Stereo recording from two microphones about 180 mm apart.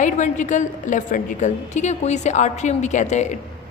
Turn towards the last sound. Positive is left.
turn(degrees=40)  # may be behind; listen again after turning